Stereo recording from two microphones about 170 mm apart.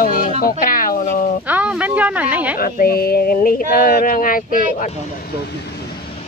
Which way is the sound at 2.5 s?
55° left (ahead or behind).